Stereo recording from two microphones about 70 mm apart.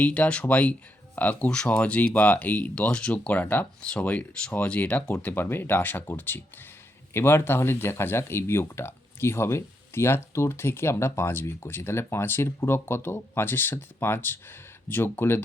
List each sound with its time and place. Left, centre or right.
0.0 s speech: centre
5.2 s speech: left